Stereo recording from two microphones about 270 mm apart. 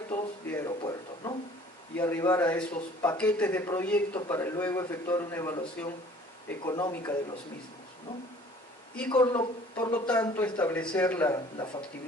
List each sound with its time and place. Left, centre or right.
0.1 s a sound: centre
2.0 s speech: centre
9.0 s speech: centre